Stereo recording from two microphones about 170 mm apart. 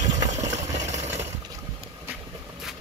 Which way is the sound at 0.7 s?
40° right (ahead or behind).